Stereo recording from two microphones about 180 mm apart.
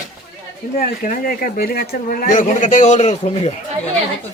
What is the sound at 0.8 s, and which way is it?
Speech, 50° left (ahead or behind).